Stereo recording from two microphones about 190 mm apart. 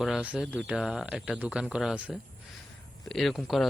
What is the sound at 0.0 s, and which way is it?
A man's voice, 5° right (ahead or behind).